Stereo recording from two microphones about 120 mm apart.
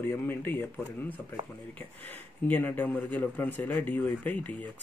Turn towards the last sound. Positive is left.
turn(degrees=15)  # may be behind; listen again after turning